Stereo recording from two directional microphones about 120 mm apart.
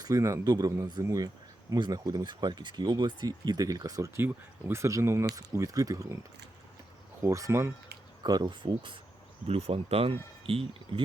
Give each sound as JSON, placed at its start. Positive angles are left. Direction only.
{"t": 0.0, "sound": "speech", "side_deg": -25}
{"t": 7.2, "sound": "speech", "side_deg": -25}
{"t": 8.2, "sound": "speech", "side_deg": -35}
{"t": 9.5, "sound": "speech", "side_deg": -55}